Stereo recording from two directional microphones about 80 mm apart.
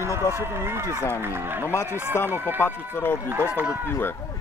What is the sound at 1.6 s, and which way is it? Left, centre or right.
Speech, left.